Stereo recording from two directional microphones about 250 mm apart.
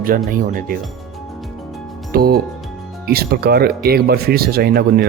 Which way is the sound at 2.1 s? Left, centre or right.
Right.